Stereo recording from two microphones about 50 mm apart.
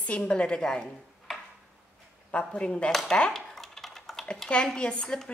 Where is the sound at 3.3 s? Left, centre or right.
Centre.